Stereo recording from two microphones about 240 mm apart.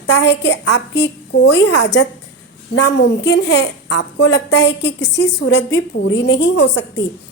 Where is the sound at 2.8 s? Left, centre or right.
Left.